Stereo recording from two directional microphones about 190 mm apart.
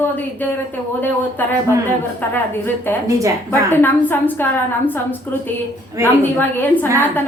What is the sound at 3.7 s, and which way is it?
Speech, 10° left (ahead or behind).